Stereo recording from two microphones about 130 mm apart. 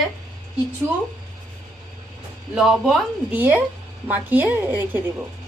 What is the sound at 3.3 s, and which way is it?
A woman's voice, 15° right (ahead or behind).